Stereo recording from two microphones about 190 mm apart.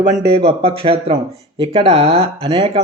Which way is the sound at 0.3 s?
30° right (ahead or behind).